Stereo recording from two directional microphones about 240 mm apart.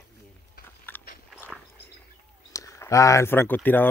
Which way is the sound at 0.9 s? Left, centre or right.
Centre.